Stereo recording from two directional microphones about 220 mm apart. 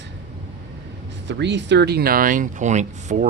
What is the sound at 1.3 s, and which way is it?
Speech, 55° right (ahead or behind).